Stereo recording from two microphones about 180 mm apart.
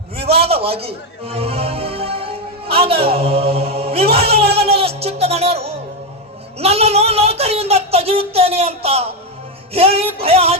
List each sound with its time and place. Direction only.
0.3 s music: 35° right (ahead or behind)
6.6 s speech: 35° right (ahead or behind)